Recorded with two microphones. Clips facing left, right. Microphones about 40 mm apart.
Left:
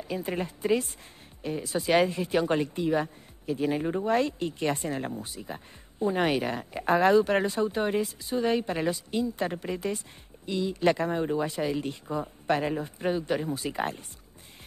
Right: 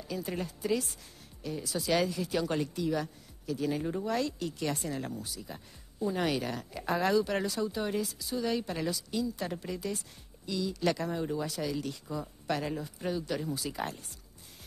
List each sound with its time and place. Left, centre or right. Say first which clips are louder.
0.1 s speech: left 4 dB; left